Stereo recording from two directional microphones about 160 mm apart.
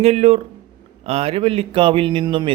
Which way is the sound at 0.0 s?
40° right (ahead or behind).